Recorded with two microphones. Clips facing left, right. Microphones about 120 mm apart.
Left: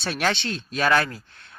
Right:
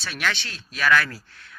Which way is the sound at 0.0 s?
35° left (ahead or behind).